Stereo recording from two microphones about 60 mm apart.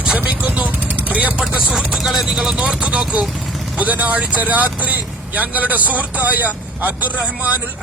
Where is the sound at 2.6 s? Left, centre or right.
Centre.